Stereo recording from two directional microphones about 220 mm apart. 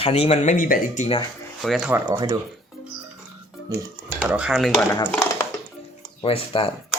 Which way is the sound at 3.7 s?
5° right (ahead or behind).